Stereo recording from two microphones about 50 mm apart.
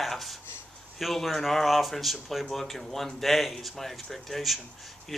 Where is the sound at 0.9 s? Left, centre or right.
Centre.